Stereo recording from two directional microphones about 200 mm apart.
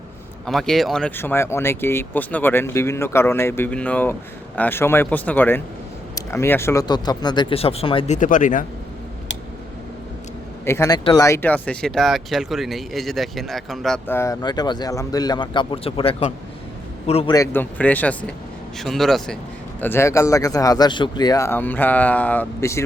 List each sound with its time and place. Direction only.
0.4 s speech: centre (ahead or behind); by 8.6 s 40° left (ahead or behind)
10.7 s speech: 15° left (ahead or behind)
17.3 s speech: 15° left (ahead or behind)
19.8 s speech: 10° left (ahead or behind)